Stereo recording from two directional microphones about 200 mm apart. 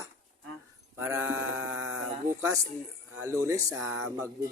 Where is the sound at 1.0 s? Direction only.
10° right (ahead or behind).